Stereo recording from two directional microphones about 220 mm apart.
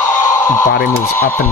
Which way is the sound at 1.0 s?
10° left (ahead or behind).